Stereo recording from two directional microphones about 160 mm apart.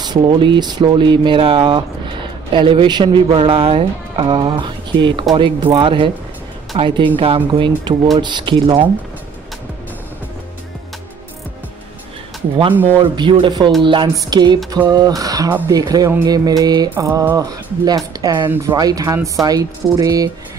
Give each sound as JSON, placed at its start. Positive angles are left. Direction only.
{"t": 0.0, "sound": "speech", "side_deg": -30}
{"t": 12.7, "sound": "mantra", "side_deg": -10}
{"t": 13.1, "sound": "speech", "side_deg": -30}
{"t": 16.9, "sound": "mantra", "side_deg": -15}
{"t": 17.4, "sound": "speech", "side_deg": -25}